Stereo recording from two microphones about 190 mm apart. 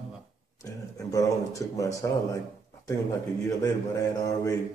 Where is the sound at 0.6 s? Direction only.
15° left (ahead or behind).